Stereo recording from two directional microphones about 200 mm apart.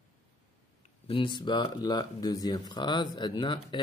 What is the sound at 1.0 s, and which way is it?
Speech, 25° left (ahead or behind).